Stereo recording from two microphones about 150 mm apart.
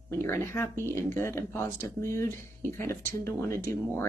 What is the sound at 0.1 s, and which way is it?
Speech, 15° left (ahead or behind).